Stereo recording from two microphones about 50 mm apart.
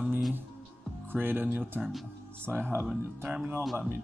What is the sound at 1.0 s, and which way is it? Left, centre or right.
Speech, right.